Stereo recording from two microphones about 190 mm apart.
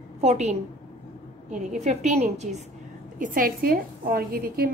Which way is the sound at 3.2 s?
45° right (ahead or behind).